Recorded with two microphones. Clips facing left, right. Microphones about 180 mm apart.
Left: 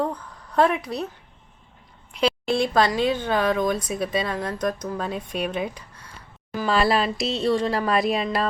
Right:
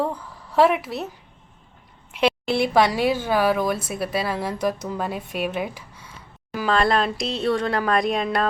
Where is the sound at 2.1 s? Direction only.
5° right (ahead or behind).